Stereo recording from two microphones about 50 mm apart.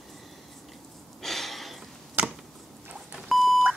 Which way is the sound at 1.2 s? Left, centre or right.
Centre.